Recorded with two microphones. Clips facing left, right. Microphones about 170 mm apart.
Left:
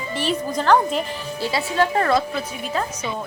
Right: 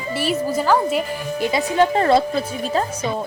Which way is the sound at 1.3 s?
20° right (ahead or behind).